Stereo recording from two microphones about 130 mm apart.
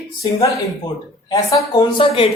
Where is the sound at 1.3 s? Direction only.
25° left (ahead or behind).